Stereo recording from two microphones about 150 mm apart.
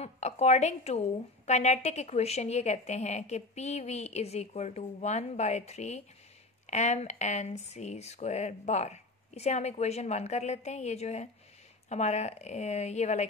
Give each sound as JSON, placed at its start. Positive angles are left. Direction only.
{"t": 0.0, "sound": "a woman's voice", "side_deg": 45}